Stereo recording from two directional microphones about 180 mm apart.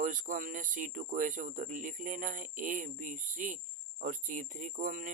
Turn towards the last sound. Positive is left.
turn(degrees=-45)  # may be behind; listen again after turning